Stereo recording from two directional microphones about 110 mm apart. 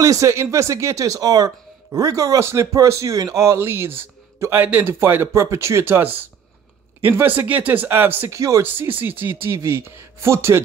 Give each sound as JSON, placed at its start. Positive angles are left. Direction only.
{"t": 0.0, "sound": "a man's voice", "side_deg": -30}